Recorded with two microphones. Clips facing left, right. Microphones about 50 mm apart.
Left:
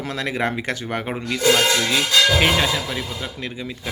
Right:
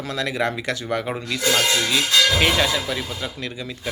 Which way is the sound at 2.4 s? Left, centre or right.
Centre.